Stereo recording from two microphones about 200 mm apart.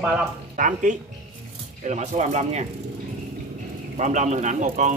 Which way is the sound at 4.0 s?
35° right (ahead or behind).